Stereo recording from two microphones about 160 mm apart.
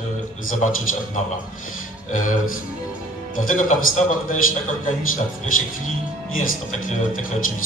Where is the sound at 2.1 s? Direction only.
55° left (ahead or behind).